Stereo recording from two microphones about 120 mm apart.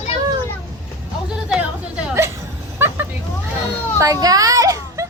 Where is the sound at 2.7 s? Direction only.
20° right (ahead or behind).